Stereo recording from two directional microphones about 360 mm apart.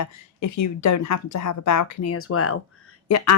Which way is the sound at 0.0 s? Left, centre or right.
Left.